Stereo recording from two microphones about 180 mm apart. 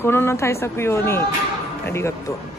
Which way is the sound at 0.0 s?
15° left (ahead or behind).